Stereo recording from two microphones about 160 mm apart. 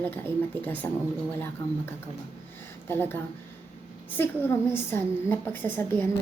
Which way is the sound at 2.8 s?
15° left (ahead or behind).